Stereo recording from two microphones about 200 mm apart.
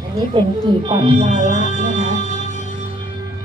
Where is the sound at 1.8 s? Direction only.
40° right (ahead or behind).